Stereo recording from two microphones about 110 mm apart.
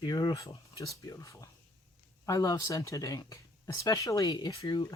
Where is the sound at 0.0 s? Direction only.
40° left (ahead or behind).